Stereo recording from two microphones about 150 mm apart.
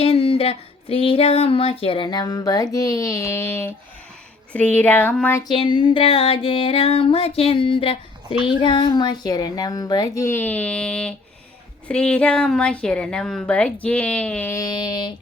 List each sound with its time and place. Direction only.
0.0 s music: 40° left (ahead or behind); by 3.7 s 15° left (ahead or behind)
4.5 s speech: 10° left (ahead or behind)
5.4 s music: 30° left (ahead or behind); by 11.1 s 5° left (ahead or behind)
11.9 s speech: 5° left (ahead or behind); by 15.1 s 30° left (ahead or behind)